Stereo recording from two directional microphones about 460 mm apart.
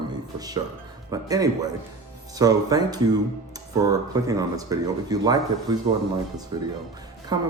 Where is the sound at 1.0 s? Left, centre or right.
Centre.